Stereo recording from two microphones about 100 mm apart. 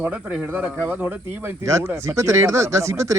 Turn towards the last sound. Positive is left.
turn(degrees=-30)  # may be behind; listen again after turning